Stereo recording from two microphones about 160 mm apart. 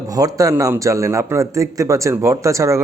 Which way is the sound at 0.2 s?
20° right (ahead or behind).